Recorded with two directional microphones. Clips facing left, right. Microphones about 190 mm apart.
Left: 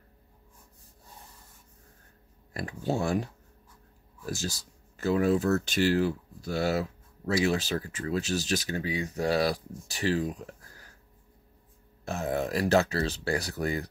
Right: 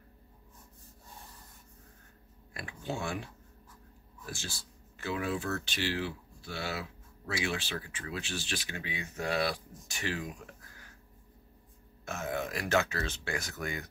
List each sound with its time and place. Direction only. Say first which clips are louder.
2.5 s speech: left 8 dB; 40° left (ahead or behind)
4.3 s speech: left 9 dB; 40° left (ahead or behind)
12.0 s speech: left 5 dB; 35° left (ahead or behind)